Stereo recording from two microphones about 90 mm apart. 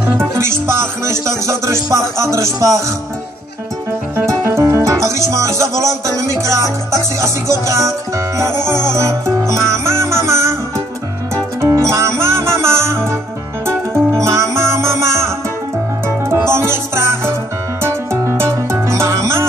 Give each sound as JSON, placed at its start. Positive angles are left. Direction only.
{"t": 0.4, "sound": "music", "side_deg": -30}
{"t": 4.3, "sound": "music", "side_deg": -30}
{"t": 11.6, "sound": "music", "side_deg": -30}